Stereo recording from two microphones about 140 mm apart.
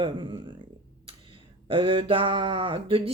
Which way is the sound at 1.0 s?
40° right (ahead or behind).